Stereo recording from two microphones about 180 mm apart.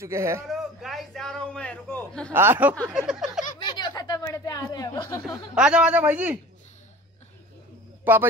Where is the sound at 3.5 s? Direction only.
25° left (ahead or behind).